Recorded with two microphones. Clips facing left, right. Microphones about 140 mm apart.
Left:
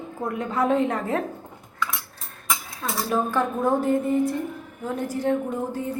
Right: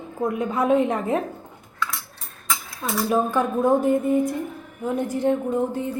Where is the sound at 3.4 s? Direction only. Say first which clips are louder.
Right 2 dB; 15° right (ahead or behind).